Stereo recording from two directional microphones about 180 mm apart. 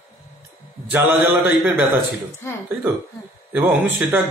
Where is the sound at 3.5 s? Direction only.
10° right (ahead or behind).